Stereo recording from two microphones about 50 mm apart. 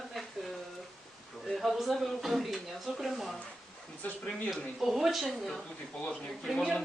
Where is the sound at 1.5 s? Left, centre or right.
Centre.